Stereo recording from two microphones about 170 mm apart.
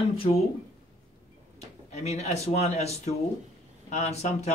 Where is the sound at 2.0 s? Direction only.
40° left (ahead or behind).